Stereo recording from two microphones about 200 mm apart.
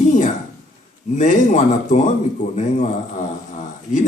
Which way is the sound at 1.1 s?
40° left (ahead or behind).